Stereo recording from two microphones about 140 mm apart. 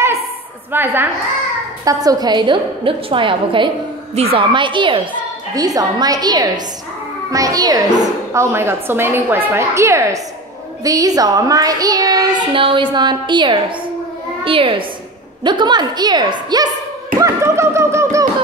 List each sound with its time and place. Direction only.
0.7 s a woman's voice: 15° right (ahead or behind)
1.9 s a woman's voice: 25° right (ahead or behind)
12.5 s a woman's voice: 35° right (ahead or behind)
17.2 s a sound: 20° right (ahead or behind)